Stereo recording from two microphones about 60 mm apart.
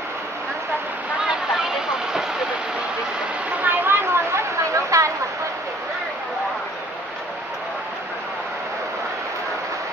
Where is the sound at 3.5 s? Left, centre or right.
Right.